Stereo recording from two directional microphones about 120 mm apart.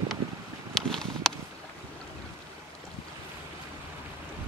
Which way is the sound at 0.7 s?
5° left (ahead or behind).